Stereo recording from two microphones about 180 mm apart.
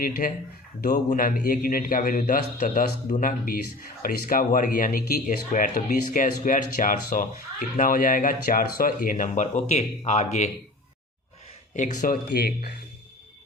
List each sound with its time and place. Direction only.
0.2 s a man's voice: 45° left (ahead or behind)
11.7 s speech: 45° left (ahead or behind)